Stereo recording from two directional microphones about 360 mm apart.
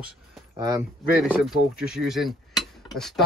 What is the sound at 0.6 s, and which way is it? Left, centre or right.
Speech, centre.